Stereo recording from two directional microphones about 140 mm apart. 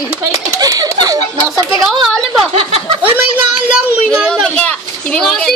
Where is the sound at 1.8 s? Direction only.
Centre (ahead or behind).